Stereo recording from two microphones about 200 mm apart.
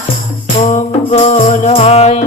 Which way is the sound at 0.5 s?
35° left (ahead or behind).